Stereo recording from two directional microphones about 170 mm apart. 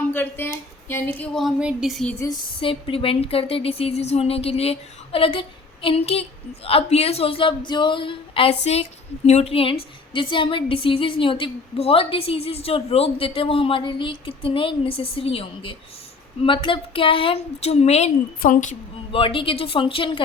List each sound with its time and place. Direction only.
0.1 s speech: 10° left (ahead or behind)
2.1 s speech: 20° left (ahead or behind)
2.6 s speech: 30° left (ahead or behind)
19.1 s speech: 30° left (ahead or behind)